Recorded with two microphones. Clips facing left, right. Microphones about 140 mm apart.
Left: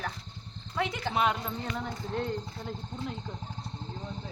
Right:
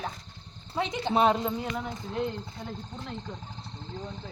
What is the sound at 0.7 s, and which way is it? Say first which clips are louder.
Speech: right 4 dB; 20° right (ahead or behind).